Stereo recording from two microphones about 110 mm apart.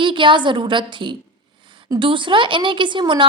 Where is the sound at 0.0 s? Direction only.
50° right (ahead or behind).